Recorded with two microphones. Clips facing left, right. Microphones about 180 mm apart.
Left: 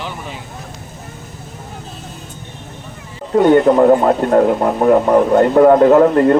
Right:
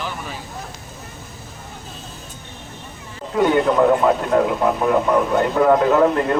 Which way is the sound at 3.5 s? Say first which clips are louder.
Left 6 dB; 40° left (ahead or behind).